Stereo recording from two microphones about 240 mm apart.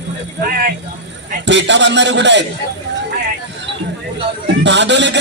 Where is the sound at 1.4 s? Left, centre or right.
Right.